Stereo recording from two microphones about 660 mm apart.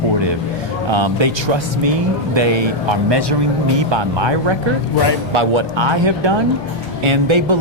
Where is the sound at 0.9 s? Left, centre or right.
Right.